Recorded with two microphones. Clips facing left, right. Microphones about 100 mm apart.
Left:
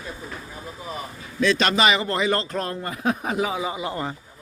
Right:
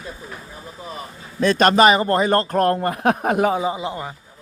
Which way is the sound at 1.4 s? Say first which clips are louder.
Right 6 dB; 45° right (ahead or behind).